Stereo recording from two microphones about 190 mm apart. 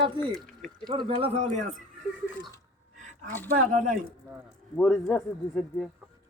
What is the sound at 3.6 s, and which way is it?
Speech, 45° right (ahead or behind).